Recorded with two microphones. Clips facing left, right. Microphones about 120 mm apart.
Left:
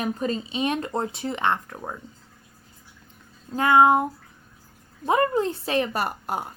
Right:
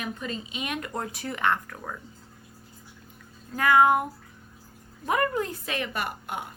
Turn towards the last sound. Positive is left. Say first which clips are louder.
# left 5 dB
turn(degrees=40)  # may be behind; listen again after turning